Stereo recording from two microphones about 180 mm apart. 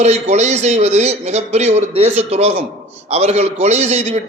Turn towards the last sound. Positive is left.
turn(degrees=-40)  # may be behind; listen again after turning